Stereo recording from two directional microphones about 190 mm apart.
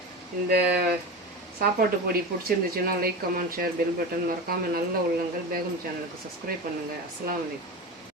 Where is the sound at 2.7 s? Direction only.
50° right (ahead or behind).